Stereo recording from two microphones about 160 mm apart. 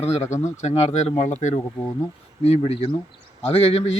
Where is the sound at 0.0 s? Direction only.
45° left (ahead or behind).